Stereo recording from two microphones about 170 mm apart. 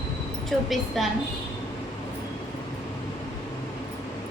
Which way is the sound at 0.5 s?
Centre (ahead or behind).